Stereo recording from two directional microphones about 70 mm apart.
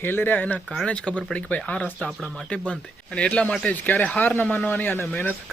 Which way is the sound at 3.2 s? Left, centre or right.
Centre.